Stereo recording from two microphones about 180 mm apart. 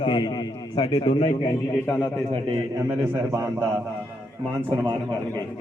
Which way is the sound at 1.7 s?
5° left (ahead or behind).